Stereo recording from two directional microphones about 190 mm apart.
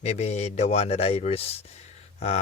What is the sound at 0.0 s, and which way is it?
Speech, 35° left (ahead or behind).